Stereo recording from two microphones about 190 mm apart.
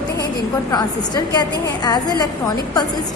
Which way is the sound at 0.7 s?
20° left (ahead or behind).